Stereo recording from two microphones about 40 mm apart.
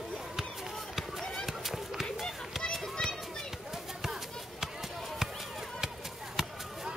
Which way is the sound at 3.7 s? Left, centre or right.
Centre.